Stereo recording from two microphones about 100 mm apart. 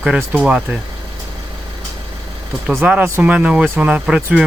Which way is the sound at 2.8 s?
15° right (ahead or behind).